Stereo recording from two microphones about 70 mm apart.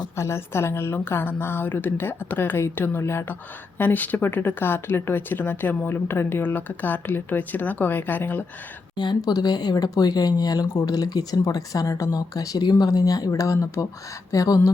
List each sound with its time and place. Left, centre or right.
0.2 s a woman's voice: left
3.8 s speech: left
9.0 s speech: left
12.8 s speech: left